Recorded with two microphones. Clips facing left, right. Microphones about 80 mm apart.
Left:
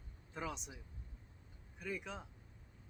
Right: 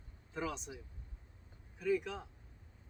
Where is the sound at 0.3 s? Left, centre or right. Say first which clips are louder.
Right 4 dB; centre.